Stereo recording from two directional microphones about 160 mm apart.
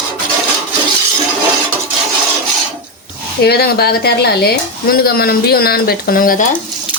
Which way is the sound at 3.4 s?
80° left.